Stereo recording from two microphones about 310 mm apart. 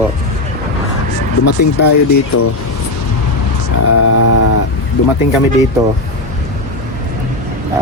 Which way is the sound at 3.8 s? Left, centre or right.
Left.